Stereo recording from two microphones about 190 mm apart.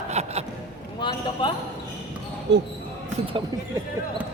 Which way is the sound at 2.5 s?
65° right (ahead or behind).